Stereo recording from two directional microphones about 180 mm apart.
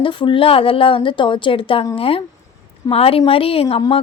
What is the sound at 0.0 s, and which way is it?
A woman's voice, 30° left (ahead or behind).